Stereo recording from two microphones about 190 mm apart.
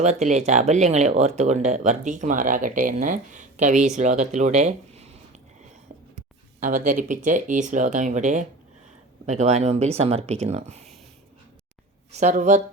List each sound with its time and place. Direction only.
0.0 s speech: 40° right (ahead or behind)
6.1 s speech: 45° right (ahead or behind)
12.1 s speech: 40° right (ahead or behind)